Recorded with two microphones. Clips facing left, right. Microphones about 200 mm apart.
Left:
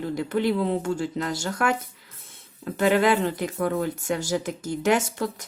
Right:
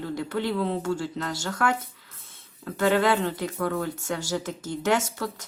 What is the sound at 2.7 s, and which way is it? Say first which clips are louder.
Speech: left 2 dB; 20° left (ahead or behind).